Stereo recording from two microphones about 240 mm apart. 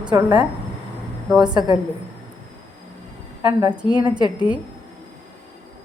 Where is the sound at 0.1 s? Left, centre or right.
Centre.